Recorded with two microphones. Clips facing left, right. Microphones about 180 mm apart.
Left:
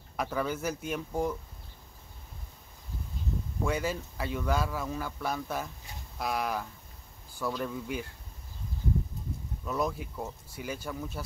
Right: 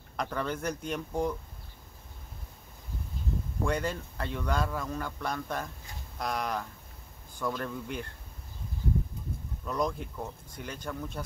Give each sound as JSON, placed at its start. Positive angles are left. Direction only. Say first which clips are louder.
{"t": 0.1, "sound": "speech", "louder": "left 1 dB", "side_deg": 5}
{"t": 3.6, "sound": "speech", "louder": "even", "side_deg": 5}
{"t": 9.7, "sound": "speech", "louder": "even", "side_deg": 5}